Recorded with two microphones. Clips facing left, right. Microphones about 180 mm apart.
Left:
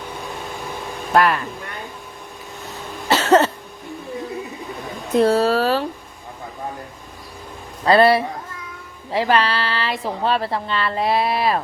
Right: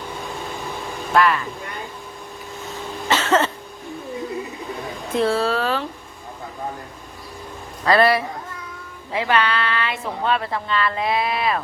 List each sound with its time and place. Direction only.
1.1 s speech: 45° left (ahead or behind)
3.1 s cough: 40° left (ahead or behind)
5.1 s a sound: 40° left (ahead or behind)
7.9 s a woman's voice: 30° left (ahead or behind)